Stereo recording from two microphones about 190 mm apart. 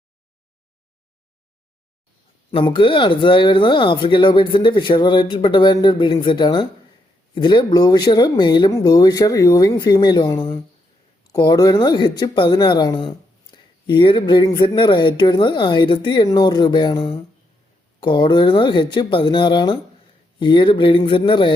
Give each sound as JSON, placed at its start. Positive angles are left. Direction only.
{"t": 2.5, "sound": "speech", "side_deg": 25}